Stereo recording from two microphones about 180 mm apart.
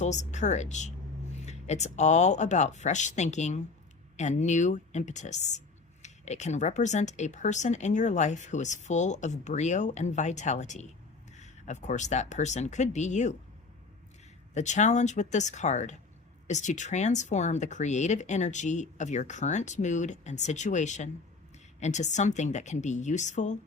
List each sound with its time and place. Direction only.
0.0 s speech: 40° left (ahead or behind)
14.5 s speech: 40° left (ahead or behind)